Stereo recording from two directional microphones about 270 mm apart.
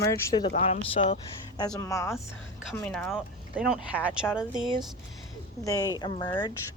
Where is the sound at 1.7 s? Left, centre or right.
Centre.